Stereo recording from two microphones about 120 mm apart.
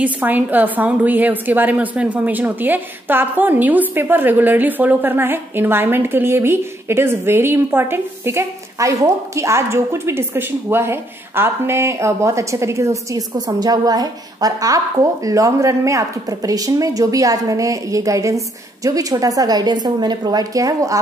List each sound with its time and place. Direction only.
0.0 s a woman's voice: 15° right (ahead or behind)